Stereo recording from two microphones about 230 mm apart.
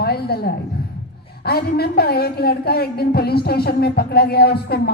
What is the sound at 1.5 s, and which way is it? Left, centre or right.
A woman's voice, left.